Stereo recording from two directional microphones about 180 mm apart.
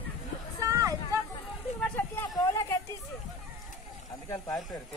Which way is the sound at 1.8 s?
10° left (ahead or behind).